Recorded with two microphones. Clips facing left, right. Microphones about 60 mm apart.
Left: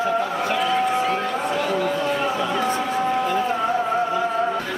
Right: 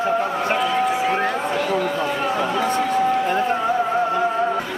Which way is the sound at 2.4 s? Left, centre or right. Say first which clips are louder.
Right 1 dB; right.